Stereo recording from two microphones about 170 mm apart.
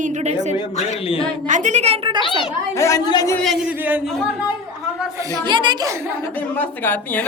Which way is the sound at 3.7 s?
10° right (ahead or behind).